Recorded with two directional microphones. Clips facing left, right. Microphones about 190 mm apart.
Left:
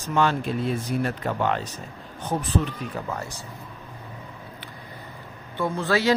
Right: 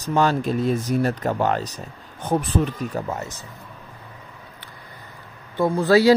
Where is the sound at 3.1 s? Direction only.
20° right (ahead or behind).